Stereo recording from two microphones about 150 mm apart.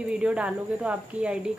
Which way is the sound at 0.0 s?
5° right (ahead or behind).